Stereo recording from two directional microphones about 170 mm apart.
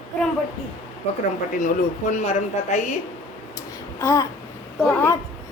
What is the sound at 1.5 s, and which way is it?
A woman's voice, 50° left (ahead or behind).